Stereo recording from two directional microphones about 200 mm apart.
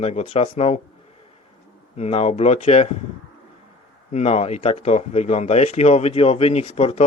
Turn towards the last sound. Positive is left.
turn(degrees=30)  # may be behind; listen again after turning